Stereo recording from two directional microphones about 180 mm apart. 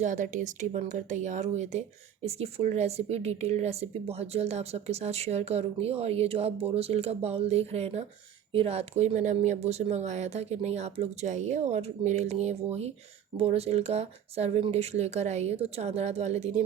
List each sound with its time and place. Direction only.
0.0 s a woman's voice: 40° right (ahead or behind)